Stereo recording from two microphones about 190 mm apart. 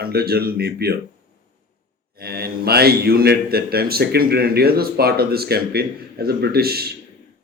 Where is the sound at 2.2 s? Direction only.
55° right (ahead or behind).